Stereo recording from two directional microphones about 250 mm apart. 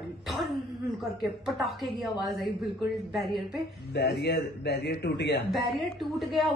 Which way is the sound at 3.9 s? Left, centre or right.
Left.